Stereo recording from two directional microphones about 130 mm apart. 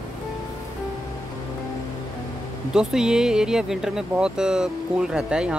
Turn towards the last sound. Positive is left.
turn(degrees=-5)  # may be behind; listen again after turning